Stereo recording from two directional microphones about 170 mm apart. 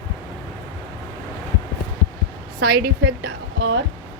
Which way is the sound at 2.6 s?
70° right (ahead or behind).